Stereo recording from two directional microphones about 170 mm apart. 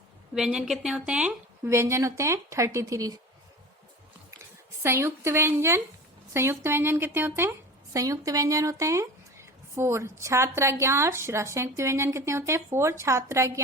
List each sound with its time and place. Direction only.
0.3 s speech: 5° right (ahead or behind)
4.8 s speech: 15° right (ahead or behind)